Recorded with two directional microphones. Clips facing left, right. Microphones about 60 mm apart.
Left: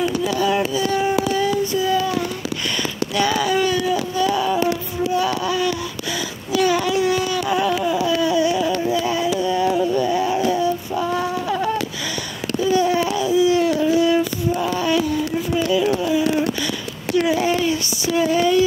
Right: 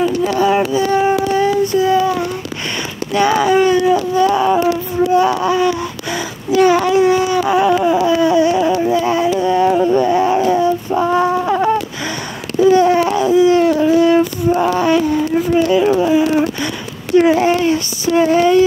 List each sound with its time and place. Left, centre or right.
0.7 s child singing: right
3.1 s speech: right
4.4 s a sound: right
6.9 s speech: right
7.3 s a sound: right
17.1 s speech: right